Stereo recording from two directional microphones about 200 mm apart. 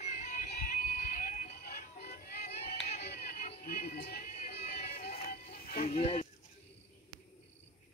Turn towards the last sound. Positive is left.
turn(degrees=30)  # may be behind; listen again after turning